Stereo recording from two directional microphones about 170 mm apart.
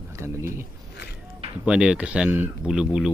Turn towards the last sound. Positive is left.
turn(degrees=-5)  # may be behind; listen again after turning